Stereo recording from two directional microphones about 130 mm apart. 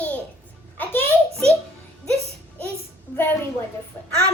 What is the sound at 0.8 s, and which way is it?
Music, 15° left (ahead or behind).